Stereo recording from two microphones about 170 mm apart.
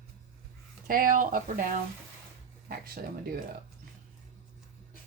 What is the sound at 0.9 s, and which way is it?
Speech, 55° right (ahead or behind).